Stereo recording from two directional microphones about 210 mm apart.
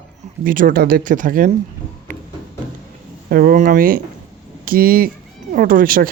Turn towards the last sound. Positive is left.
turn(degrees=-45)  # may be behind; listen again after turning